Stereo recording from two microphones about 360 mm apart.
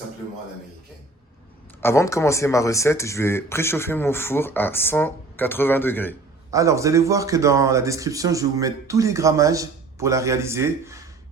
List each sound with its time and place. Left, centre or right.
1.8 s speech: centre
6.5 s speech: centre